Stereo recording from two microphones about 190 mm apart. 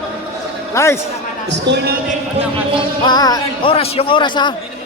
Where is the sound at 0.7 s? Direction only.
15° left (ahead or behind).